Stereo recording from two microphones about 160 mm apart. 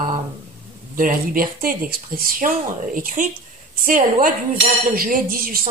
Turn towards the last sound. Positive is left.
turn(degrees=-60)  # may be behind; listen again after turning